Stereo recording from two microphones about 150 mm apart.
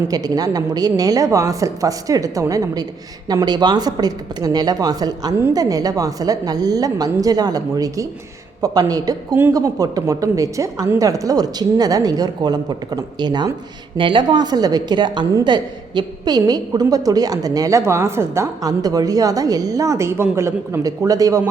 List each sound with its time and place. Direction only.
0.1 s a woman's voice: 25° right (ahead or behind)